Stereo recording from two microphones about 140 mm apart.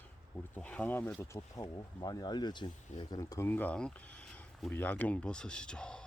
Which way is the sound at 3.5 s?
10° left (ahead or behind).